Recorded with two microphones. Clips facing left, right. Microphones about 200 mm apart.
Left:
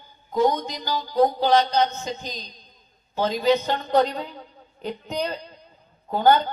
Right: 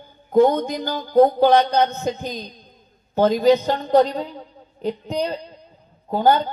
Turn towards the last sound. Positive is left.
turn(degrees=-30)  # may be behind; listen again after turning